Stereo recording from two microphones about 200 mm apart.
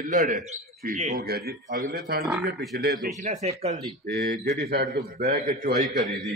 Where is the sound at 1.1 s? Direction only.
50° right (ahead or behind).